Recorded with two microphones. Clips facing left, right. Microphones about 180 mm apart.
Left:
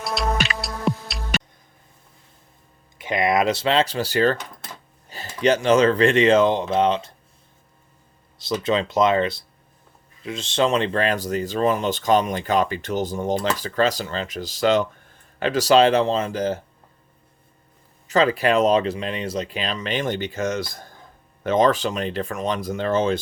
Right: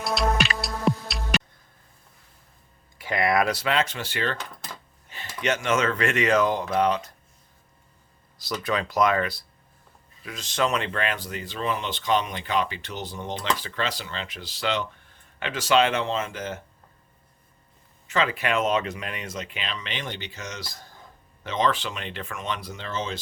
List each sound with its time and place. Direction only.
0.0 s music: centre (ahead or behind)
3.0 s speech: 20° left (ahead or behind)
8.6 s speech: 25° left (ahead or behind)
18.1 s speech: 40° left (ahead or behind)